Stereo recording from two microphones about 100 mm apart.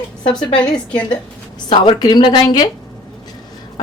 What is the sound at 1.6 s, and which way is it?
A woman's voice, 55° left (ahead or behind).